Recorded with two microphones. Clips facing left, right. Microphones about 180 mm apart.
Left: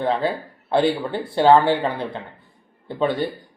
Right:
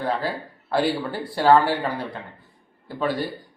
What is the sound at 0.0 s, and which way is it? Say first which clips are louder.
A man's voice: left 4 dB; 20° left (ahead or behind).